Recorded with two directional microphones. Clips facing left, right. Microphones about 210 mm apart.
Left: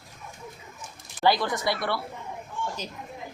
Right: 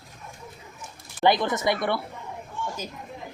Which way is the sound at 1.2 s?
20° right (ahead or behind).